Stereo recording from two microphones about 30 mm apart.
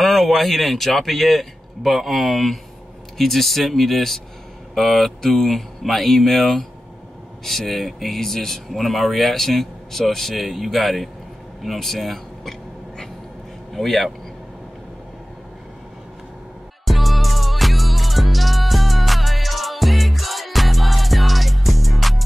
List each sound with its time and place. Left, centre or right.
0.0 s a man's voice: centre
13.7 s a man's voice: centre
16.8 s music: centre